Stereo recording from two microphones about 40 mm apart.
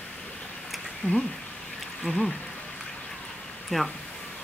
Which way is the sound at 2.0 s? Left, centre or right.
Centre.